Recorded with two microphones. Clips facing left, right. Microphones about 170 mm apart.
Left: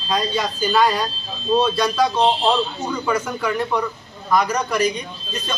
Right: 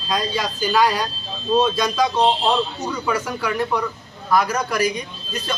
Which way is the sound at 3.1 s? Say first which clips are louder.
Left 1 dB; 5° right (ahead or behind).